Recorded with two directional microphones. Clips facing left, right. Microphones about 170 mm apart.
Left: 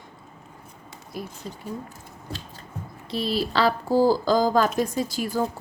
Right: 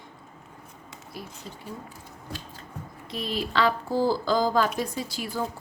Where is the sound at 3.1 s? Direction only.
35° left (ahead or behind).